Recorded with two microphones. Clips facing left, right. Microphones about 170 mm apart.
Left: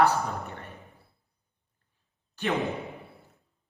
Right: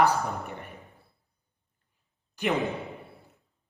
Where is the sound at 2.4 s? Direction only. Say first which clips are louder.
Right 1 dB; 20° right (ahead or behind).